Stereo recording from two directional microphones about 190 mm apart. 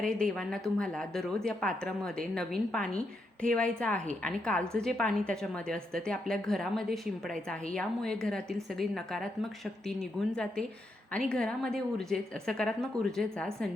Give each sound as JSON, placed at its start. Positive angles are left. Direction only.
{"t": 0.0, "sound": "a woman's voice", "side_deg": 5}